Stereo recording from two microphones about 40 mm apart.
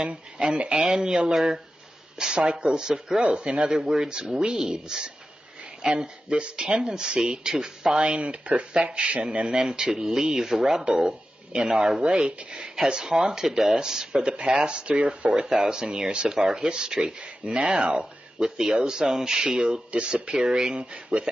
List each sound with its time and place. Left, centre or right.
0.0 s speech: right
0.8 s speech: centre
8.0 s speech: right
9.6 s speech: centre
15.3 s speech: centre
18.4 s speech: centre
19.5 s speech: right